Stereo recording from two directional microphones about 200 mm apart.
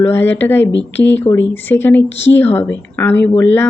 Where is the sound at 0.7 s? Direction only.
65° left (ahead or behind).